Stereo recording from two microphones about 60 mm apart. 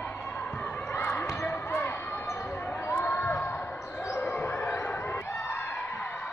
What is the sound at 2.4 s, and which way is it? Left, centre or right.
Basketball bounce, left.